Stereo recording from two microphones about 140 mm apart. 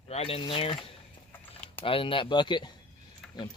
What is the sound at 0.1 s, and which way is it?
Speech, 45° left (ahead or behind).